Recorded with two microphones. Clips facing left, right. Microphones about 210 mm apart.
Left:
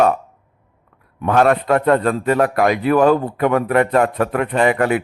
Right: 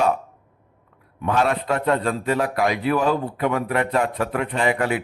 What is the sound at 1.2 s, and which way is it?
A man's voice, 55° left (ahead or behind).